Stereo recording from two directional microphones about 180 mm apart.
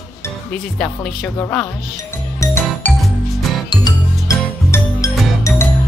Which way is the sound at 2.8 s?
10° left (ahead or behind).